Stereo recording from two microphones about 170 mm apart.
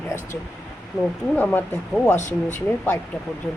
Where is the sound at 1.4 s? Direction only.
10° left (ahead or behind).